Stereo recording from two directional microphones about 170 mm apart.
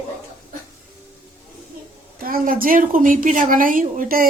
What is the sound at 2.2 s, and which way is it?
A woman's voice, 55° right (ahead or behind).